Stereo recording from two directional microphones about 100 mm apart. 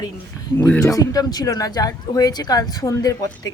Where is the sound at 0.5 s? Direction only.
20° left (ahead or behind).